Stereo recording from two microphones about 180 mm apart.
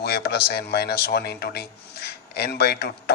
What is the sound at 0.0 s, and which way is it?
Speech, 60° left (ahead or behind).